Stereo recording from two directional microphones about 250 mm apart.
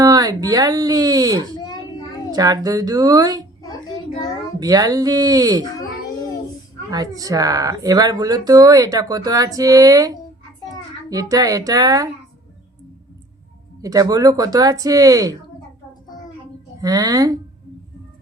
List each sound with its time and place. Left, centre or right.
0.0 s speech: centre
1.5 s a sound: centre
2.3 s speech: centre
3.6 s child singing: centre
4.6 s speech: centre
6.9 s speech: centre
13.8 s speech: centre
16.8 s speech: centre